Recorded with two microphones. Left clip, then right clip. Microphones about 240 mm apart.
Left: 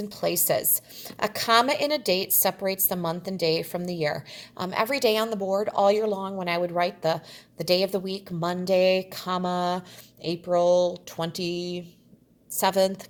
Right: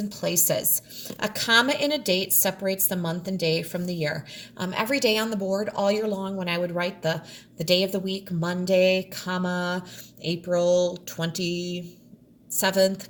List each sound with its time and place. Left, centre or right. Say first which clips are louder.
0.2 s a woman's voice: left 1 dB; left